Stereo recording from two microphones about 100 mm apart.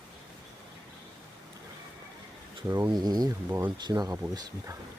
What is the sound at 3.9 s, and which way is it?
Speech, 40° right (ahead or behind).